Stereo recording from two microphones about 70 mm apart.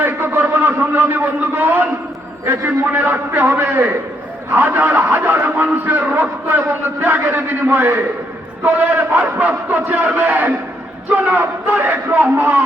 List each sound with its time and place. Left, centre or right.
0.0 s a man's voice: right